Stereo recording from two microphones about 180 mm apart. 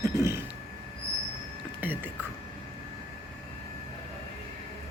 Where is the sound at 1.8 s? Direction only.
10° right (ahead or behind).